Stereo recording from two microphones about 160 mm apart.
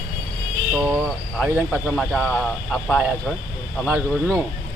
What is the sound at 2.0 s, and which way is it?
Speech, centre (ahead or behind).